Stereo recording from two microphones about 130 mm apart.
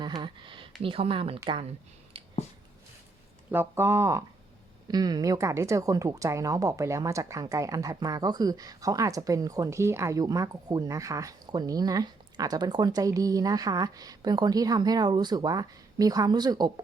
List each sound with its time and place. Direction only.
0.0 s a sound: 35° right (ahead or behind)
0.8 s speech: 45° right (ahead or behind)
3.5 s speech: 15° right (ahead or behind)